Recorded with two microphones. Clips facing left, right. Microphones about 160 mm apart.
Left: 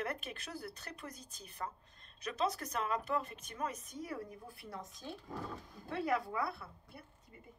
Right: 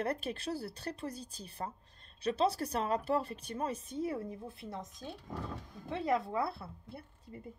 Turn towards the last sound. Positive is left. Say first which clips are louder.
# right 7 dB
turn(degrees=-30)  # may be behind; listen again after turning